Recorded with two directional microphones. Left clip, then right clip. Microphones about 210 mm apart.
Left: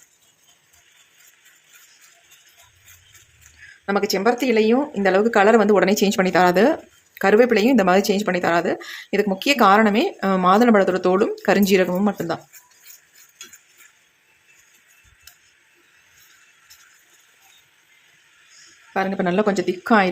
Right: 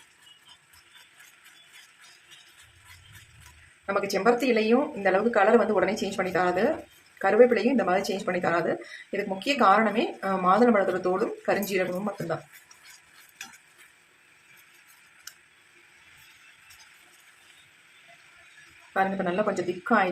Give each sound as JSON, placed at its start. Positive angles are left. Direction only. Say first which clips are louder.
{"t": 3.8, "sound": "speech", "louder": "left 4 dB", "side_deg": 45}
{"t": 18.9, "sound": "speech", "louder": "left 5 dB", "side_deg": 45}